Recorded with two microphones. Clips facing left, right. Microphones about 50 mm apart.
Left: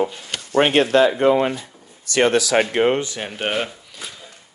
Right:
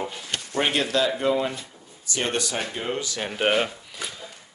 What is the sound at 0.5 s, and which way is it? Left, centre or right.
Speech, left.